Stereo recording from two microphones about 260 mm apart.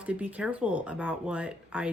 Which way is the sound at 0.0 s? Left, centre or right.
Centre.